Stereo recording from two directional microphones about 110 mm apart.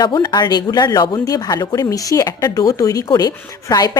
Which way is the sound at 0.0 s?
45° left (ahead or behind).